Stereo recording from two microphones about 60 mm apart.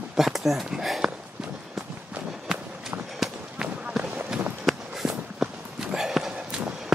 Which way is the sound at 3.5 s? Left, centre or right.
Centre.